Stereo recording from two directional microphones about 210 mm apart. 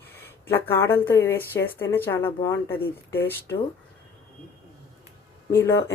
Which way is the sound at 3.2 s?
15° left (ahead or behind).